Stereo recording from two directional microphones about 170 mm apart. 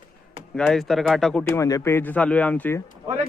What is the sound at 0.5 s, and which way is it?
Speech, 5° left (ahead or behind).